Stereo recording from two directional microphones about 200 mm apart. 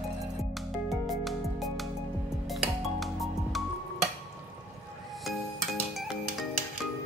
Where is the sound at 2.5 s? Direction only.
Centre (ahead or behind).